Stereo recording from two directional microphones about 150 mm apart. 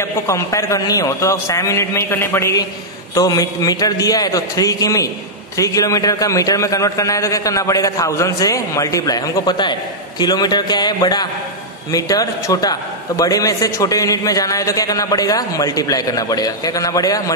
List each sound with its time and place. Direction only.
0.0 s a man's voice: 20° left (ahead or behind)